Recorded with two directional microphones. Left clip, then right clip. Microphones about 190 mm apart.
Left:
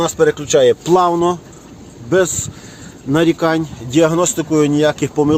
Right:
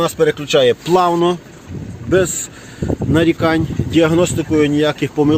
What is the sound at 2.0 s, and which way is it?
Speech, centre (ahead or behind).